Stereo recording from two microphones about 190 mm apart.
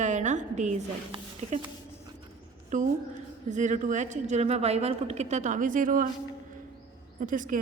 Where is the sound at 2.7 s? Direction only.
40° right (ahead or behind).